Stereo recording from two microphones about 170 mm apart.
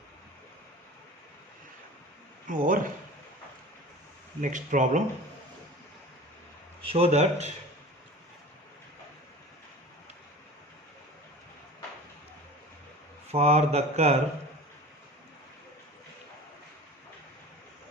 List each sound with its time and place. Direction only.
2.5 s speech: 50° right (ahead or behind)
4.4 s speech: 50° right (ahead or behind)
6.8 s speech: 35° right (ahead or behind)
13.3 s speech: 40° right (ahead or behind)